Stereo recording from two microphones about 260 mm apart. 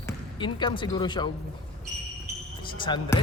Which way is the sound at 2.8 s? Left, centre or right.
Centre.